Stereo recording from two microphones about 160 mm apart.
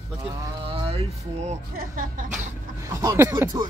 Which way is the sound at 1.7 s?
60° right (ahead or behind).